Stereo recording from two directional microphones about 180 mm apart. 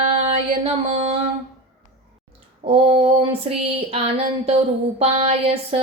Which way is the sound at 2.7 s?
30° right (ahead or behind).